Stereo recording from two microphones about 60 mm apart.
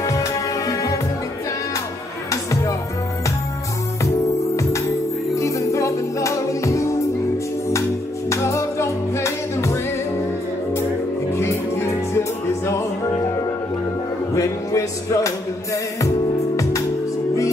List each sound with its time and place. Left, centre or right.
0.0 s music: left
5.3 s music: left
8.3 s music: left
11.3 s music: left
14.3 s music: left